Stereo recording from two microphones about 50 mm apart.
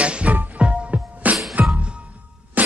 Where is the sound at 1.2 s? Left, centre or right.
Right.